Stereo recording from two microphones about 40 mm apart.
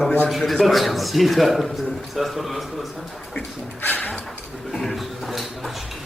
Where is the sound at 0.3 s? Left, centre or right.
Centre.